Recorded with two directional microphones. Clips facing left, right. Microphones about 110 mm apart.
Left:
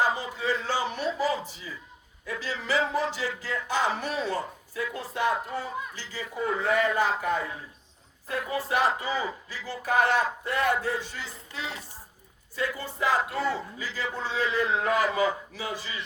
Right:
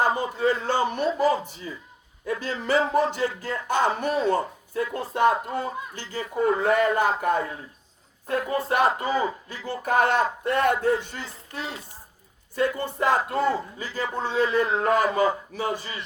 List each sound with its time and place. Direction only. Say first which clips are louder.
0.0 s speech: right 5 dB; 50° right (ahead or behind)